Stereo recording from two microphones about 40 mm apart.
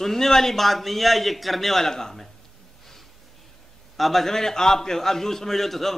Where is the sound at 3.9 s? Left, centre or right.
Centre.